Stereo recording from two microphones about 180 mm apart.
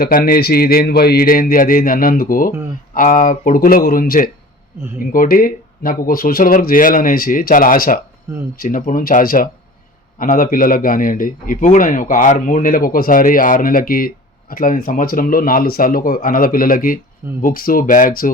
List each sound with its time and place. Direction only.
0.0 s a man's voice: 55° left (ahead or behind)